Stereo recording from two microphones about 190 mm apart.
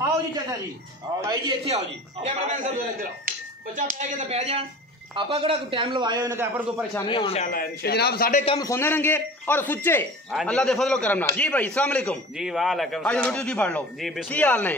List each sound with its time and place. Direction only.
0.0 s a sound: 20° right (ahead or behind)
1.3 s a man's voice: 30° right (ahead or behind)
2.5 s a man's voice: 45° right (ahead or behind); by 6.6 s 15° right (ahead or behind)
7.1 s a man's voice: 30° left (ahead or behind)
7.4 s a man's voice: 50° left (ahead or behind)
8.5 s a man's voice: 20° left (ahead or behind)